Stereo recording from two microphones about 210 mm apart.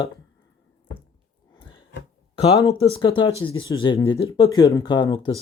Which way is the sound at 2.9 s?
25° left (ahead or behind).